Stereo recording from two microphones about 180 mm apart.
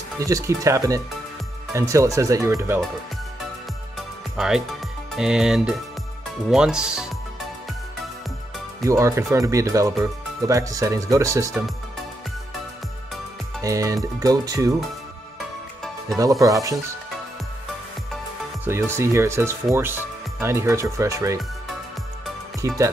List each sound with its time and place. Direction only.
0.2 s speech: 20° right (ahead or behind)
4.4 s speech: 5° right (ahead or behind)
8.8 s speech: 15° right (ahead or behind)
13.6 s speech: 20° right (ahead or behind)
16.2 s speech: 20° right (ahead or behind)
18.7 s speech: 15° right (ahead or behind)
22.6 s speech: 20° right (ahead or behind)